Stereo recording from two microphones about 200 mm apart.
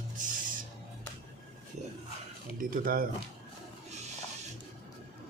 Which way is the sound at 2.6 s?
45° right (ahead or behind).